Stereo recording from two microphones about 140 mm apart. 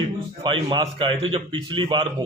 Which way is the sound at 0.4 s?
35° right (ahead or behind).